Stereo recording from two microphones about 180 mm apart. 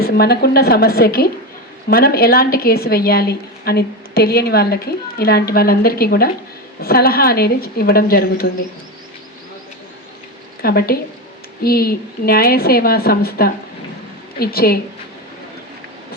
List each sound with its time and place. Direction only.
0.0 s a woman's voice: 60° left (ahead or behind)
10.6 s a woman's voice: 60° left (ahead or behind)